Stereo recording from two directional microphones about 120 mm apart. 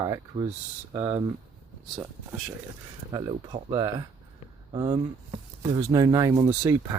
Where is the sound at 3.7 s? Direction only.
35° right (ahead or behind).